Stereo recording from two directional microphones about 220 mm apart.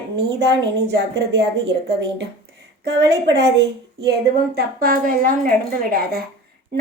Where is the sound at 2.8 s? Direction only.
50° right (ahead or behind).